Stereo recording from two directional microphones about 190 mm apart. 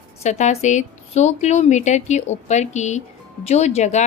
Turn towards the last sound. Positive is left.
turn(degrees=35)  # may be behind; listen again after turning